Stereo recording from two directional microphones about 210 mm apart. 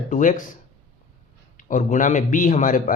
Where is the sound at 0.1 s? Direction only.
40° left (ahead or behind).